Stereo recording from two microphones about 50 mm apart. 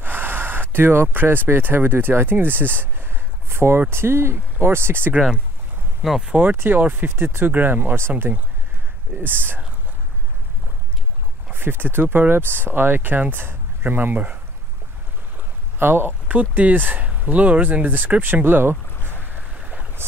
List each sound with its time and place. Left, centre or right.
0.0 s a sound: right
1.1 s speech: right
6.2 s speech: right
6.5 s speech: right
7.5 s speech: right
9.2 s speech: right
11.5 s speech: right
15.3 s a sound: right
16.3 s speech: right
19.6 s boat: right